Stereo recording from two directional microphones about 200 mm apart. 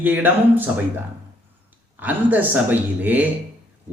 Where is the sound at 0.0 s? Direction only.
10° right (ahead or behind).